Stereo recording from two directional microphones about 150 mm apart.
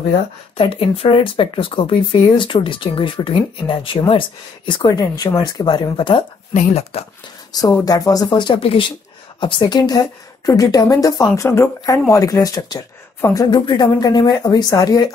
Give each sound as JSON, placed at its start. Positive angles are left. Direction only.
{"t": 0.6, "sound": "speech", "side_deg": 40}
{"t": 6.5, "sound": "speech", "side_deg": 45}
{"t": 7.8, "sound": "speech", "side_deg": 25}